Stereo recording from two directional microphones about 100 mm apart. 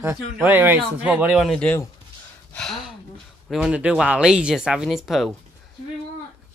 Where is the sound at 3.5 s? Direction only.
5° right (ahead or behind).